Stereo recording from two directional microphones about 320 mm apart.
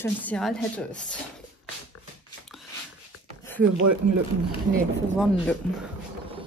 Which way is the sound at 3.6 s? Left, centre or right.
Right.